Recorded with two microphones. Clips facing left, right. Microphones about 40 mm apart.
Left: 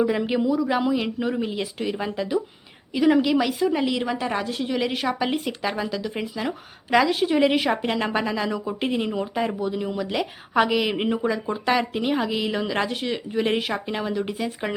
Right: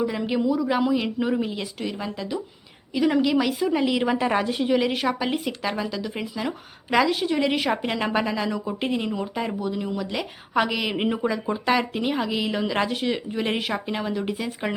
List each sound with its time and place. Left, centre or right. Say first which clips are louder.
0.0 s a woman's voice: left 2 dB; centre
2.0 s a woman's voice: left 4 dB; centre
4.0 s a woman's voice: right 3 dB; centre